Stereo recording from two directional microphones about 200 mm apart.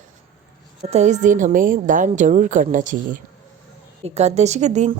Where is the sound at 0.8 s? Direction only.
35° right (ahead or behind).